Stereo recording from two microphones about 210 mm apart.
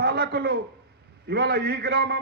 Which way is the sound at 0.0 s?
45° right (ahead or behind).